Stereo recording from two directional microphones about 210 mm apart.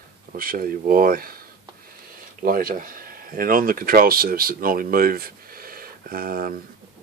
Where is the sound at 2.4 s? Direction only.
40° right (ahead or behind).